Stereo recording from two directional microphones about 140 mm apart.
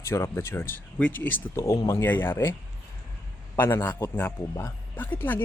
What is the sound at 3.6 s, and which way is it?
Speech, 15° left (ahead or behind).